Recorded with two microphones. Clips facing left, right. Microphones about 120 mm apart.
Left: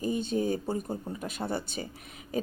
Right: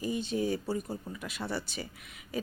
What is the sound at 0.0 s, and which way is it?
Speech, 45° left (ahead or behind).